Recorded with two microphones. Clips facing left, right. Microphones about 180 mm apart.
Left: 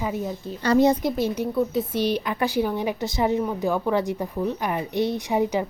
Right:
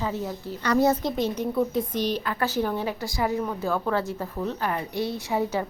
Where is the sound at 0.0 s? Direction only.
15° left (ahead or behind).